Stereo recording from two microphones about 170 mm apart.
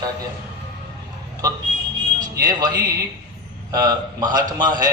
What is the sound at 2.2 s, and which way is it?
A man's voice, 25° right (ahead or behind).